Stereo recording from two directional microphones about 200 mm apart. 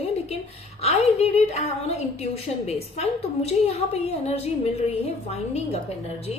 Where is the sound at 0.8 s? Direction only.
30° left (ahead or behind).